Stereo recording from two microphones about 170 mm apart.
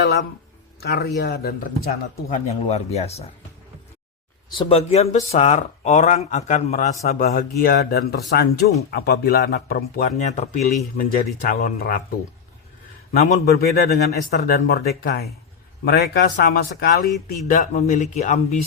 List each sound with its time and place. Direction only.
0.8 s speech: 70° left (ahead or behind)
2.3 s speech: 40° left (ahead or behind)
4.4 s speech: 30° left (ahead or behind)
7.2 s speech: 55° left (ahead or behind)
10.2 s speech: 45° left (ahead or behind)
10.9 s speech: 55° left (ahead or behind)
13.4 s speech: 65° left (ahead or behind)
17.5 s speech: 45° left (ahead or behind)